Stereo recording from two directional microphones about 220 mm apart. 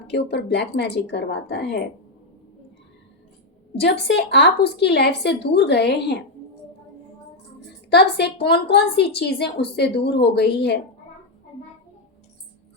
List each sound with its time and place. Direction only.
0.1 s a woman's voice: 50° left (ahead or behind)
3.8 s a woman's voice: 50° left (ahead or behind)
7.9 s a woman's voice: 50° left (ahead or behind)